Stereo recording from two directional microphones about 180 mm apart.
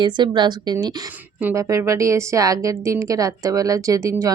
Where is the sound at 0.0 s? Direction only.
25° right (ahead or behind).